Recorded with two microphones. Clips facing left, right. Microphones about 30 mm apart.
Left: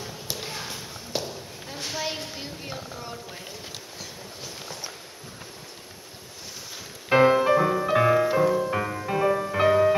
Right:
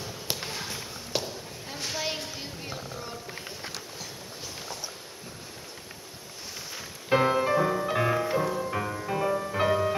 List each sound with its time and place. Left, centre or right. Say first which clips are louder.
0.3 s basketball bounce: right 1 dB; right
1.1 s a sound: left 1 dB; centre
7.1 s music: left 5 dB; centre